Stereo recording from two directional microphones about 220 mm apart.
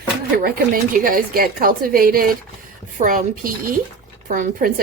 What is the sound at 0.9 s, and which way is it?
Speech, 40° right (ahead or behind).